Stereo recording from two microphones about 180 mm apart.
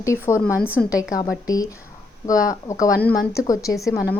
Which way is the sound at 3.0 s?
10° left (ahead or behind).